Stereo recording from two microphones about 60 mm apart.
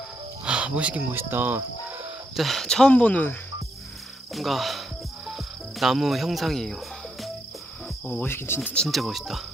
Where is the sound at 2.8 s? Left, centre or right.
Left.